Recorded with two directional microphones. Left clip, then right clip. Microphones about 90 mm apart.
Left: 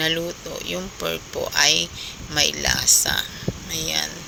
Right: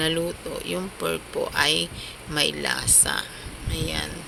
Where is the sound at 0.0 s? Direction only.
15° left (ahead or behind).